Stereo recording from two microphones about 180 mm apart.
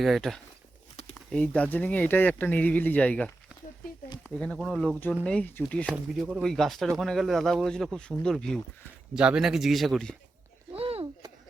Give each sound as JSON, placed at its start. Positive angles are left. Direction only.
{"t": 0.0, "sound": "speech", "side_deg": 0}
{"t": 4.4, "sound": "speech", "side_deg": 5}
{"t": 5.8, "sound": "speech", "side_deg": -5}
{"t": 10.8, "sound": "a sound", "side_deg": -35}